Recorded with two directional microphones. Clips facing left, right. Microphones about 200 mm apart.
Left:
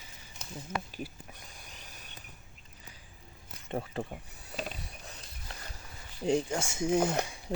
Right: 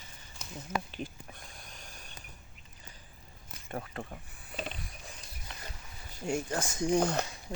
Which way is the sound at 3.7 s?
25° left (ahead or behind).